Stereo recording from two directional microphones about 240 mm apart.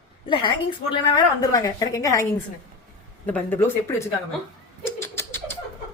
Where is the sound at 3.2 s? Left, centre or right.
Centre.